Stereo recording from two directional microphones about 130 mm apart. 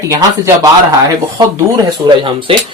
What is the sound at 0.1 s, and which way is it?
Speech, 25° right (ahead or behind).